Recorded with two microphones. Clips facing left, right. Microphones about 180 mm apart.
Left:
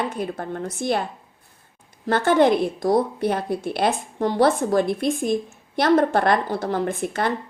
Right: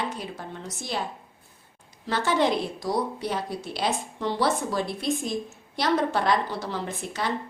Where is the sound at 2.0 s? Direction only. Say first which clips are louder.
Left 7 dB; 55° left (ahead or behind).